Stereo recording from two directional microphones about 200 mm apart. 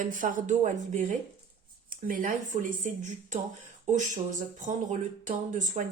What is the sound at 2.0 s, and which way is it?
Speech, 40° right (ahead or behind).